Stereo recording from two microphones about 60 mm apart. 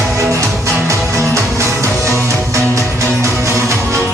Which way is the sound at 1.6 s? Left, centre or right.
Right.